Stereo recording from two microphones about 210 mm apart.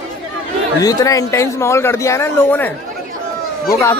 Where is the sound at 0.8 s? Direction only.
15° left (ahead or behind).